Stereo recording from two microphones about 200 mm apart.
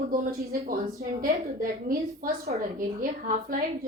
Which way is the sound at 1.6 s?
45° right (ahead or behind).